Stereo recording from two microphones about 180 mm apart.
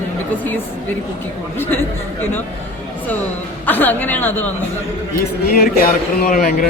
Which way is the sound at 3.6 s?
10° left (ahead or behind).